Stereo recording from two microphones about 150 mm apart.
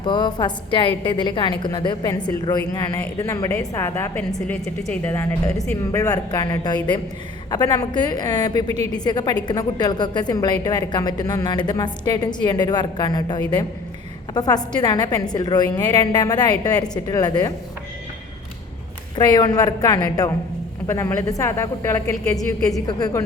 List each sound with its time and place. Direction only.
0.0 s a woman's voice: 30° left (ahead or behind)
4.5 s a woman's voice: 5° left (ahead or behind); by 17.5 s 25° left (ahead or behind)
19.1 s a woman's voice: 30° left (ahead or behind)